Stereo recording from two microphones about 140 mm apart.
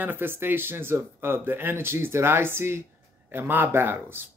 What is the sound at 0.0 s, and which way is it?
Speech, 15° right (ahead or behind).